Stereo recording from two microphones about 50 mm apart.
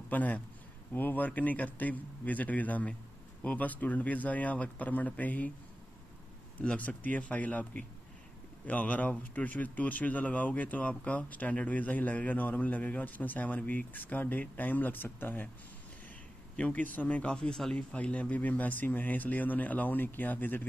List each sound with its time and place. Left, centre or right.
0.1 s a man's voice: left
6.6 s speech: left
16.5 s speech: left
17.2 s speech: centre
17.7 s speech: left